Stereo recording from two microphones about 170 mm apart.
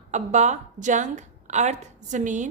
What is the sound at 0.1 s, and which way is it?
A woman's voice, 45° right (ahead or behind).